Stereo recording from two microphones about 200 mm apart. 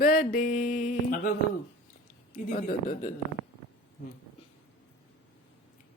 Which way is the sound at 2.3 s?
45° left (ahead or behind).